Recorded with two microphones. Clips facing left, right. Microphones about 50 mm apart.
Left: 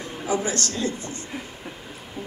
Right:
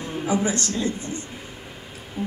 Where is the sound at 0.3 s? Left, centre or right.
Right.